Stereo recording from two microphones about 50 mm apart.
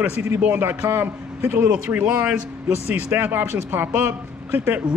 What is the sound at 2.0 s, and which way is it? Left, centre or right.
Speech, right.